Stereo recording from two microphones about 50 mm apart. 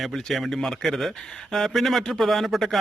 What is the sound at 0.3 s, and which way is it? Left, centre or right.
Speech, centre.